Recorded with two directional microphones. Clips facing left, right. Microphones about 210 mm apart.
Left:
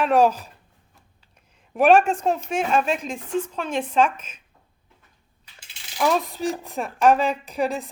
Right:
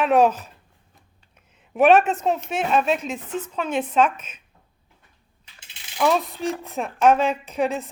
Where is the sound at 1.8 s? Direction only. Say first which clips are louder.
Even; 5° right (ahead or behind).